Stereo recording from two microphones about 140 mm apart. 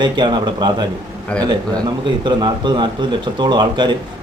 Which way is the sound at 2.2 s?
35° right (ahead or behind).